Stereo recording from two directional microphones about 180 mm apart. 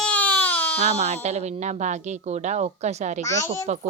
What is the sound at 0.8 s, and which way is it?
A woman's voice, 40° right (ahead or behind).